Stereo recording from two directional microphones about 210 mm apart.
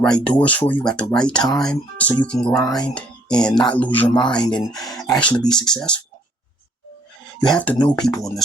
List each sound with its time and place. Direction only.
0.0 s speech: 5° left (ahead or behind)
4.6 s speech: 15° left (ahead or behind)
5.5 s speech: 5° left (ahead or behind)
7.3 s speech: 5° left (ahead or behind)